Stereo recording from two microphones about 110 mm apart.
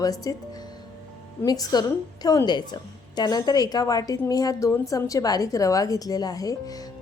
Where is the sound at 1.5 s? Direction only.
35° left (ahead or behind).